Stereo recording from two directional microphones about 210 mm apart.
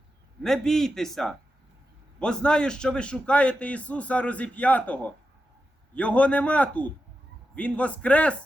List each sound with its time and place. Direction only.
0.4 s a man's voice: centre (ahead or behind)